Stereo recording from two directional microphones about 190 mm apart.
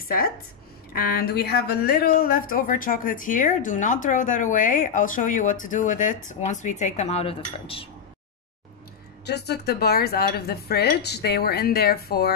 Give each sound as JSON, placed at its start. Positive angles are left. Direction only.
{"t": 0.0, "sound": "speech", "side_deg": 50}
{"t": 9.2, "sound": "speech", "side_deg": 60}